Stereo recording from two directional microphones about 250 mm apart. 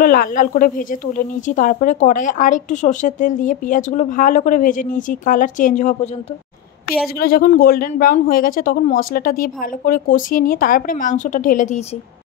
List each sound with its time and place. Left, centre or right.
0.0 s speech: left
7.2 s speech: left